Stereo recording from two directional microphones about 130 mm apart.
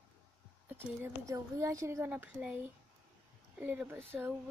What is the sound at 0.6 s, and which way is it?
Speech, 15° right (ahead or behind).